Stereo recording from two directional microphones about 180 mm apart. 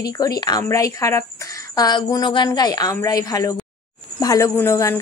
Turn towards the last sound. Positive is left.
turn(degrees=15)  # may be behind; listen again after turning